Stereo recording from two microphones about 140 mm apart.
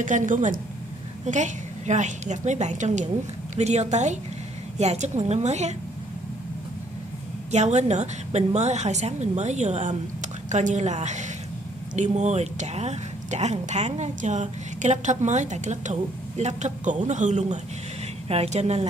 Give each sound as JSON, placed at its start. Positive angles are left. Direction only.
{"t": 0.0, "sound": "a woman's voice", "side_deg": -65}
{"t": 7.5, "sound": "a woman's voice", "side_deg": -55}